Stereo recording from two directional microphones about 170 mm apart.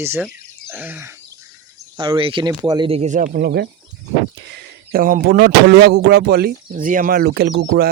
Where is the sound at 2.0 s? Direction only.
30° right (ahead or behind).